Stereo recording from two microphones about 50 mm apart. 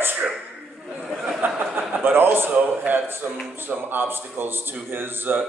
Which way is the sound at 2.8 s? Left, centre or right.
Right.